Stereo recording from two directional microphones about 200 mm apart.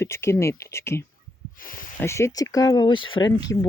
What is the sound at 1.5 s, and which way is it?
Speech, 45° left (ahead or behind).